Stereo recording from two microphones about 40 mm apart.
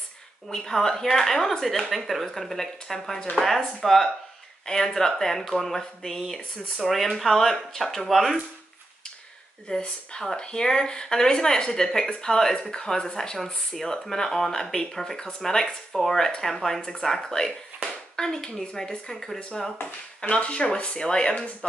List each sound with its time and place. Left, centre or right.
0.5 s speech: centre
9.7 s speech: left
18.9 s speech: centre
20.2 s speech: left